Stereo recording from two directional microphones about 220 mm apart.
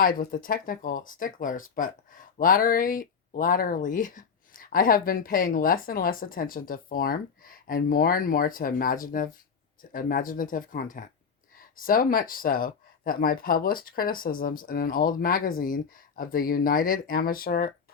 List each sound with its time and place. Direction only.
0.0 s speech: 40° left (ahead or behind)